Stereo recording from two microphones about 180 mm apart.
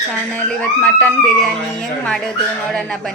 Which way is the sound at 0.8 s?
10° left (ahead or behind).